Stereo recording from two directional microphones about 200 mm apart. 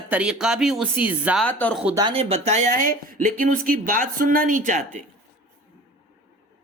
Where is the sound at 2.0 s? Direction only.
25° right (ahead or behind).